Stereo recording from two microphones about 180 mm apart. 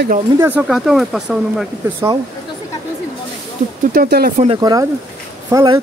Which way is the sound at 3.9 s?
60° right (ahead or behind).